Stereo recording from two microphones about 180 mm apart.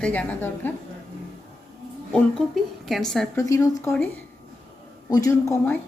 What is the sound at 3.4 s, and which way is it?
Speech, 15° left (ahead or behind).